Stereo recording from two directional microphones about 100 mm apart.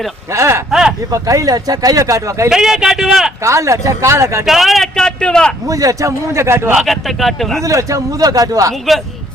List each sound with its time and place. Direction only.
0.3 s speech: 30° right (ahead or behind)
0.7 s speech: 5° right (ahead or behind)
1.1 s speech: 35° right (ahead or behind)
2.5 s speech: 5° right (ahead or behind)
3.4 s speech: 30° right (ahead or behind)
4.4 s speech: centre (ahead or behind)
5.6 s speech: 35° right (ahead or behind)
6.7 s speech: centre (ahead or behind)
7.6 s speech: 30° right (ahead or behind)